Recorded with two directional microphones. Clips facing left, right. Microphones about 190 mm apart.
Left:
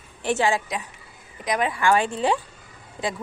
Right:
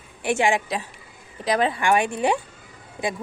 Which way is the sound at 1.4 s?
30° right (ahead or behind).